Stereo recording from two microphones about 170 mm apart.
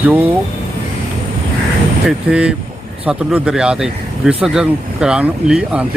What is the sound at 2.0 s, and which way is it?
Speech, 5° right (ahead or behind).